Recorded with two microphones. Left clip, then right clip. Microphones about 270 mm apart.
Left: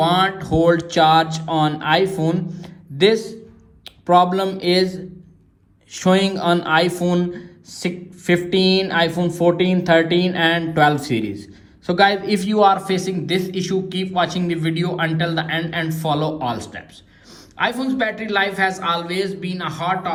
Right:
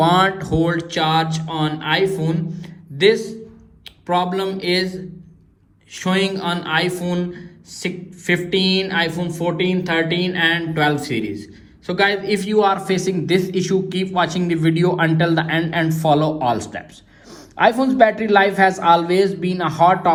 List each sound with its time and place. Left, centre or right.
0.0 s a man's voice: centre